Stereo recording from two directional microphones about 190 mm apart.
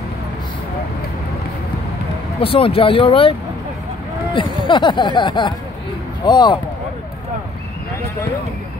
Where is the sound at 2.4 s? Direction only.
30° left (ahead or behind).